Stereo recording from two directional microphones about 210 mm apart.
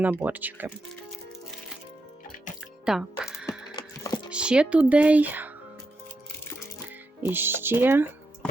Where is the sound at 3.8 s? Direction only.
20° left (ahead or behind).